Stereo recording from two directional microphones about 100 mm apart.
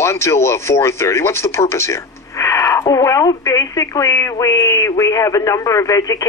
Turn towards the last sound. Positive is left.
turn(degrees=35)  # may be behind; listen again after turning